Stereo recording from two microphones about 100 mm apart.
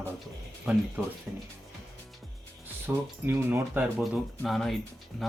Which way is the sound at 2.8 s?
25° right (ahead or behind).